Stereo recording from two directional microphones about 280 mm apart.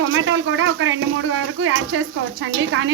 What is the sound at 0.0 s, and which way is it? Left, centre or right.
Speech, right.